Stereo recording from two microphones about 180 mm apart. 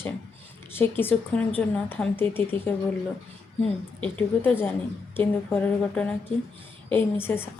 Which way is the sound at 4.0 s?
10° left (ahead or behind).